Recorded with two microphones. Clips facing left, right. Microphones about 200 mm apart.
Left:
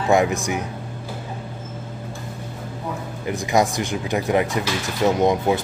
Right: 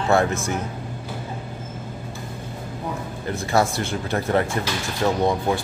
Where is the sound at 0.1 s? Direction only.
15° left (ahead or behind).